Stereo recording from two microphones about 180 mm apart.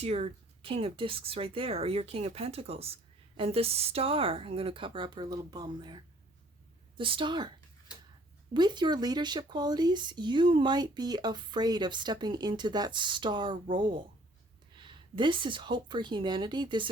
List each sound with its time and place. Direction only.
0.0 s speech: 35° right (ahead or behind)
8.5 s speech: 25° right (ahead or behind)